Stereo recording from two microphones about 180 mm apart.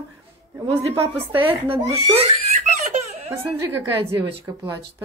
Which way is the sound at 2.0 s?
35° right (ahead or behind).